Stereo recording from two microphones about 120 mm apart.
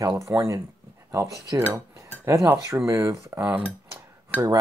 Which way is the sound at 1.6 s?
25° right (ahead or behind).